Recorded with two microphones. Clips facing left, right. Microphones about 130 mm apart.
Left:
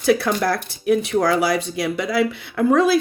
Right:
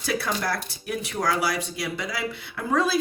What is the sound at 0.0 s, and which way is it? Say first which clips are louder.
Speech: left 9 dB; 55° left (ahead or behind).